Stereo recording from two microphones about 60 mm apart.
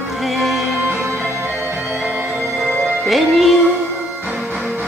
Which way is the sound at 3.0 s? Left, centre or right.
Centre.